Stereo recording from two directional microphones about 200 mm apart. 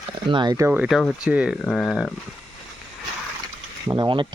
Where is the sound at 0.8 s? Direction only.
Centre (ahead or behind).